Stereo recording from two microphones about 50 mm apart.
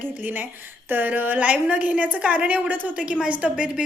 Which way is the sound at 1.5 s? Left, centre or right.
Right.